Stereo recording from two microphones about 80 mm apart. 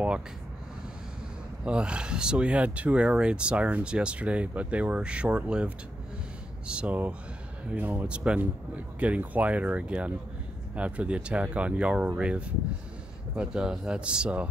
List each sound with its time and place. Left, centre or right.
1.6 s speech: centre
6.7 s speech: centre